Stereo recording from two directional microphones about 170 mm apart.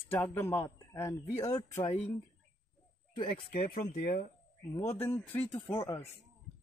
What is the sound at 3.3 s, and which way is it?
Speech, 55° left (ahead or behind).